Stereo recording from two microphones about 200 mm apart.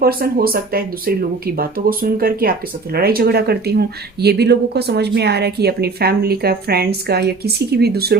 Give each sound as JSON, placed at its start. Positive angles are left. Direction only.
{"t": 0.0, "sound": "speech", "side_deg": -50}